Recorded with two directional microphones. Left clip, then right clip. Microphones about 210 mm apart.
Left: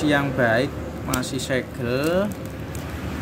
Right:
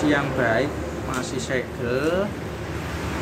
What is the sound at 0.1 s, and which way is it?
Speech, 35° left (ahead or behind).